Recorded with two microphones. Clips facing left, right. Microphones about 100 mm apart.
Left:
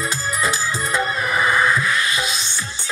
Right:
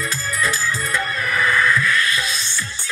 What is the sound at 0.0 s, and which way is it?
Music, 20° left (ahead or behind).